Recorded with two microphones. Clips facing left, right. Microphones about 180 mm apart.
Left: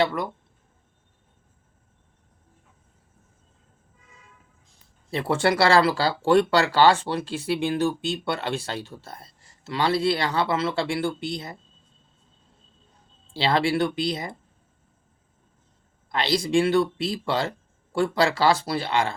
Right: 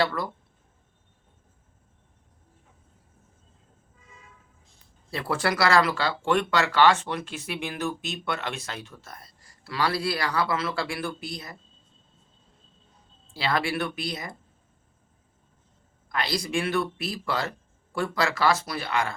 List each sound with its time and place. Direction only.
0.0 s speech: 20° left (ahead or behind)
5.1 s speech: 25° left (ahead or behind)
13.3 s speech: 30° left (ahead or behind)
16.1 s speech: 25° left (ahead or behind)